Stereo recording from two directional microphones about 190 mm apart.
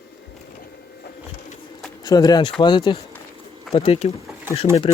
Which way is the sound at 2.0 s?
20° left (ahead or behind).